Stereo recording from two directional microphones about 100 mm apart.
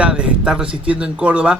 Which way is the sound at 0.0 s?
10° right (ahead or behind).